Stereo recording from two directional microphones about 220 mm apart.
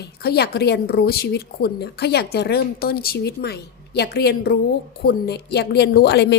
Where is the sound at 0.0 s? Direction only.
45° left (ahead or behind).